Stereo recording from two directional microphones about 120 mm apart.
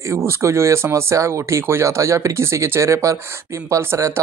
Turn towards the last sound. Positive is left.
turn(degrees=-20)  # may be behind; listen again after turning